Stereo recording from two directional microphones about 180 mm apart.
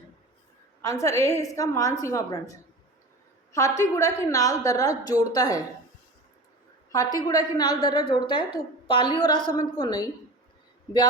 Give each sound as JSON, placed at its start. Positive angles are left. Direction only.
{"t": 0.8, "sound": "a woman's voice", "side_deg": 15}
{"t": 6.9, "sound": "a woman's voice", "side_deg": 20}